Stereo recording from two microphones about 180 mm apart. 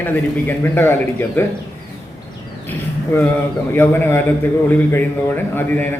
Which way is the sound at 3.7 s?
10° left (ahead or behind).